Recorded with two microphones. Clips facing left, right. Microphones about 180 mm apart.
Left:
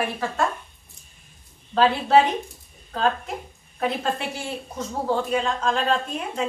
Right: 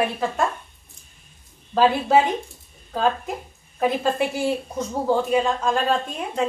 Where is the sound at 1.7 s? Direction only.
10° right (ahead or behind).